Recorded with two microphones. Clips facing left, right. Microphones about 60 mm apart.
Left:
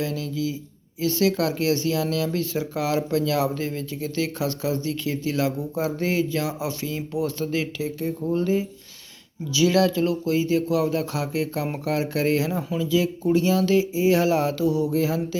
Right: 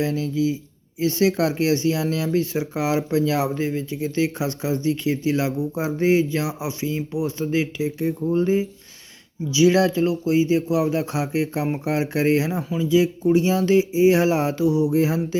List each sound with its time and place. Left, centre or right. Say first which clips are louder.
0.0 s speech: right 5 dB; right
12.5 s speech: right 1 dB; centre
12.8 s speech: right 5 dB; right